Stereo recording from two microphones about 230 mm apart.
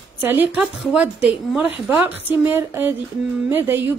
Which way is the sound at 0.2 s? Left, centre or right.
Centre.